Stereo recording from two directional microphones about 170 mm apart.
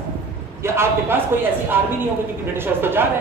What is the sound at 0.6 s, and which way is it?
Speech, 15° right (ahead or behind).